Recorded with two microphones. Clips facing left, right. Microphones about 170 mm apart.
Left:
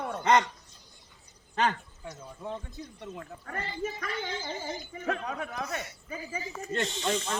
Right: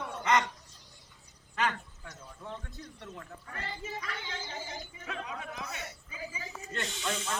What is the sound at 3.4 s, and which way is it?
Speech, 60° left (ahead or behind).